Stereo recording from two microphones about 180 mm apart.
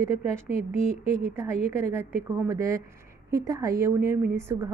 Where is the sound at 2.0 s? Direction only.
15° right (ahead or behind).